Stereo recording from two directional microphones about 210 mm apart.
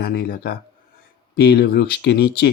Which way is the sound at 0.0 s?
45° left (ahead or behind).